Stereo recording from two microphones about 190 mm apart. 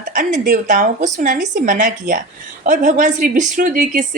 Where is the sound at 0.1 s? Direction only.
40° right (ahead or behind).